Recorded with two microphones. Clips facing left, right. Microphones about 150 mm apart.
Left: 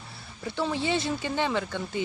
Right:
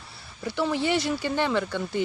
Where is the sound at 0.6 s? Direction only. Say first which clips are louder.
Right 3 dB; 25° left (ahead or behind).